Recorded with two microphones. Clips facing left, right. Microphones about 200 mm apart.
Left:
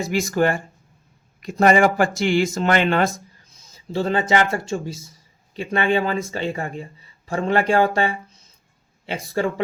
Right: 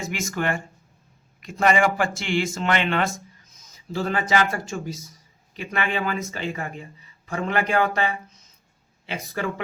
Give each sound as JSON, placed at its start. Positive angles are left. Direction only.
{"t": 0.0, "sound": "speech", "side_deg": 35}